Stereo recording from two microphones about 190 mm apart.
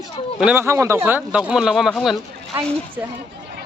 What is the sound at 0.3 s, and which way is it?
Speech, 5° right (ahead or behind).